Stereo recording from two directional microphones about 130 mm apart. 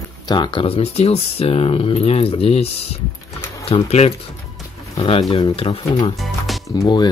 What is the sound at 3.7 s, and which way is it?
Speech, 50° left (ahead or behind).